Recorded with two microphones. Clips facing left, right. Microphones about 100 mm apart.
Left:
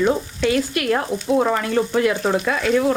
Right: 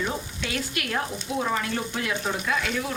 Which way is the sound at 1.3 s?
65° left (ahead or behind).